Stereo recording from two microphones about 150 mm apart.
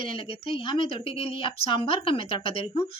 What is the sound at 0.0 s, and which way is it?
Speech, 35° left (ahead or behind).